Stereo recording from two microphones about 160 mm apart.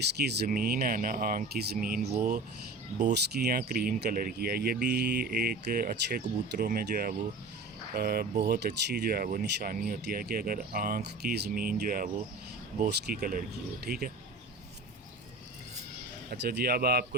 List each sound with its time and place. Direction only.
0.2 s speech: 90° right; by 2.4 s 60° right (ahead or behind)
3.1 s speech: 90° right; by 8.3 s 70° right (ahead or behind)
8.3 s speech: 60° right (ahead or behind)
12.9 s speech: 90° right
16.3 s speech: 85° right